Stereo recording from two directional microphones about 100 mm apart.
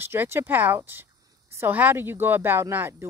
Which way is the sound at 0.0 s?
25° right (ahead or behind).